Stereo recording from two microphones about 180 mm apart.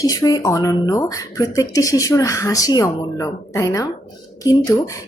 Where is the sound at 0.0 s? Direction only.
20° left (ahead or behind).